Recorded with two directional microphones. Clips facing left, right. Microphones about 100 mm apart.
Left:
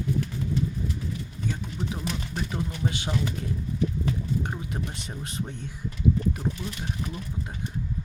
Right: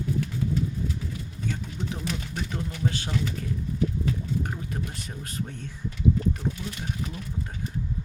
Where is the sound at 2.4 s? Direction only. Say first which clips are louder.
Right 1 dB; 15° left (ahead or behind).